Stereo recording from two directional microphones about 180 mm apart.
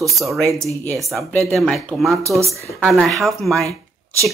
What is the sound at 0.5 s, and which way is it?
Speech, 15° right (ahead or behind).